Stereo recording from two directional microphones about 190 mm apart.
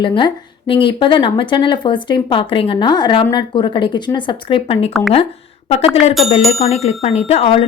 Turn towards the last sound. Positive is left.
turn(degrees=30)  # may be behind; listen again after turning